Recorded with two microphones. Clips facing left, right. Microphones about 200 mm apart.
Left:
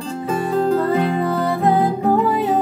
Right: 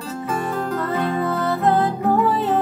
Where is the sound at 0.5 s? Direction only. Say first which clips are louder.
Left 7 dB; 30° left (ahead or behind).